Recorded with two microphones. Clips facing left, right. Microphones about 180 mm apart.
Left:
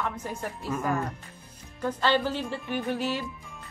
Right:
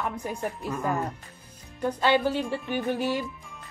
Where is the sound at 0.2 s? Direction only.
15° right (ahead or behind).